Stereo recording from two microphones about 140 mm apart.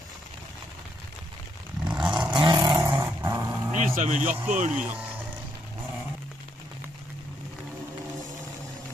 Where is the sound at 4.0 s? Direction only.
60° right (ahead or behind).